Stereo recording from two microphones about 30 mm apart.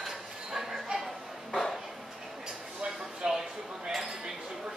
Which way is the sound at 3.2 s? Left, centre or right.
Right.